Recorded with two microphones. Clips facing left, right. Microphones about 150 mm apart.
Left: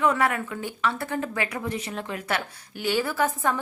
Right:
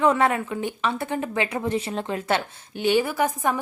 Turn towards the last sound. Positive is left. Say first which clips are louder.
# right 1 dB
turn(degrees=-15)  # may be behind; listen again after turning